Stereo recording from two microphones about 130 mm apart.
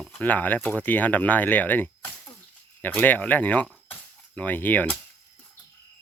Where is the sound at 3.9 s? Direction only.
10° left (ahead or behind).